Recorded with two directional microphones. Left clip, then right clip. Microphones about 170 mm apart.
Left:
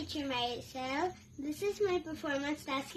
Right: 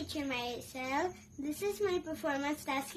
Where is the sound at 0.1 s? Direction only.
10° right (ahead or behind).